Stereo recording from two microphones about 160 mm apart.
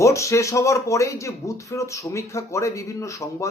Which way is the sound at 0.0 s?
20° left (ahead or behind).